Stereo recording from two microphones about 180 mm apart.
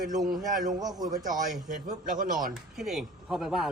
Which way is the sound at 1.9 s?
45° right (ahead or behind).